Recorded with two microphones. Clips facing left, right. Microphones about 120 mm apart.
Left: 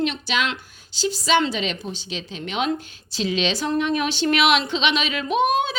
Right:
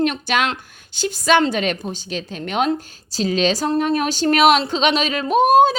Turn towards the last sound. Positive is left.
turn(degrees=-40)  # may be behind; listen again after turning